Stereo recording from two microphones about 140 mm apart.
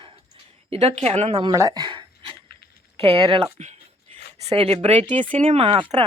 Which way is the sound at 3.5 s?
50° right (ahead or behind).